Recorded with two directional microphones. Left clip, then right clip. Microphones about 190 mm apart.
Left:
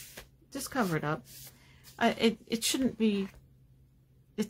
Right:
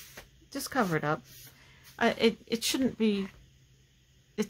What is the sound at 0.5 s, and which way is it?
Speech, 5° right (ahead or behind).